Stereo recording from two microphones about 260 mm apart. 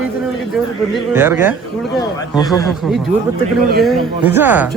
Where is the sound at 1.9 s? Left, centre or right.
Centre.